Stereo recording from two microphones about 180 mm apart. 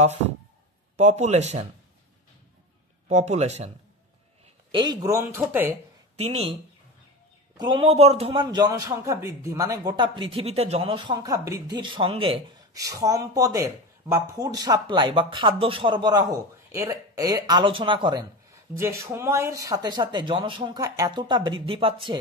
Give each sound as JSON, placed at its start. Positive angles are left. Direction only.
{"t": 0.9, "sound": "speech", "side_deg": -40}
{"t": 3.1, "sound": "speech", "side_deg": -40}
{"t": 4.6, "sound": "speech", "side_deg": -25}
{"t": 6.1, "sound": "speech", "side_deg": -35}
{"t": 7.5, "sound": "a man's voice", "side_deg": -25}